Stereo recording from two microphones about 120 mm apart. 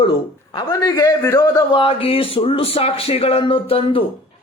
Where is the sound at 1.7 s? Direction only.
50° left (ahead or behind).